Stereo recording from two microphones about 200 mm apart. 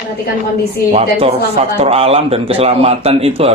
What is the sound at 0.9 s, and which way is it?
A man's voice, 30° right (ahead or behind).